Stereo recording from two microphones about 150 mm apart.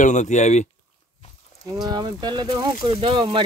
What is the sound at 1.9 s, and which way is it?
Speech, 30° right (ahead or behind).